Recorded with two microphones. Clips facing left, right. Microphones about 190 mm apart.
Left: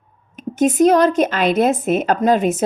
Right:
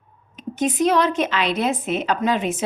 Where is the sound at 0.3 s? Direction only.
45° left (ahead or behind).